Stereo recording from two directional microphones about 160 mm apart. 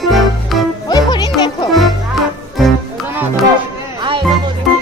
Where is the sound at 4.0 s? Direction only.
30° right (ahead or behind).